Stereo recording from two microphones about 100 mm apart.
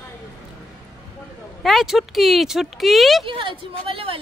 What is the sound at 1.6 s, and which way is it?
Speech, centre (ahead or behind).